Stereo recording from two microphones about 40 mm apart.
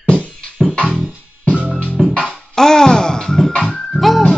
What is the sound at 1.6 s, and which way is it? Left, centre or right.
Music, right.